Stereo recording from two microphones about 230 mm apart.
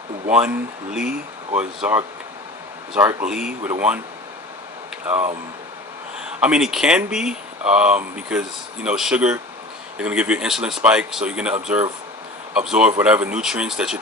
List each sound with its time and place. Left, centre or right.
0.3 s speech: centre
1.5 s speech: centre
5.1 s speech: right
6.4 s speech: centre
12.5 s speech: centre